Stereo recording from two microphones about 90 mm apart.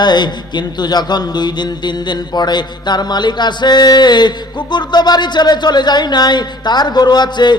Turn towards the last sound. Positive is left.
turn(degrees=55)  # may be behind; listen again after turning